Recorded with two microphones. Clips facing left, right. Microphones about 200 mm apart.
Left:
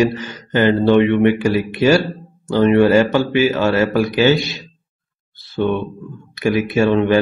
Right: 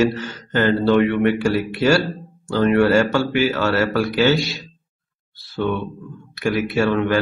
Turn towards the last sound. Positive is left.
turn(degrees=20)  # may be behind; listen again after turning